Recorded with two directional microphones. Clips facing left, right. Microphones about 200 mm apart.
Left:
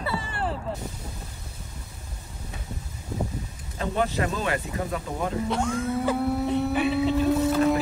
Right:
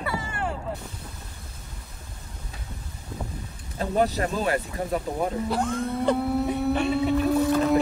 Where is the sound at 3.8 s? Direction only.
40° right (ahead or behind).